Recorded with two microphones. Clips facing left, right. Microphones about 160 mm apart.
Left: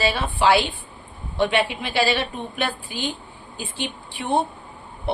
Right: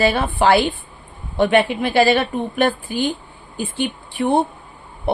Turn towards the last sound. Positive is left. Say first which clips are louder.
# right 5 dB
turn(degrees=-50)  # may be behind; listen again after turning